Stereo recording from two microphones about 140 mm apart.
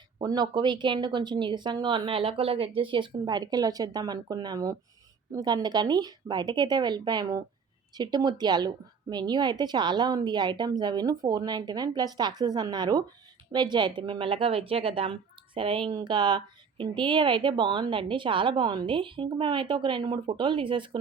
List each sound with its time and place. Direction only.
0.2 s speech: 30° right (ahead or behind)